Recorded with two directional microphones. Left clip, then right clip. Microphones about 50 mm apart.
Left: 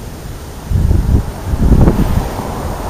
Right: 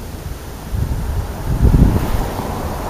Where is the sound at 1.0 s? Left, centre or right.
Centre.